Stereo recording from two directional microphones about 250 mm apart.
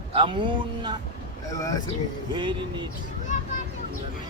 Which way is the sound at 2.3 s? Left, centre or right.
Centre.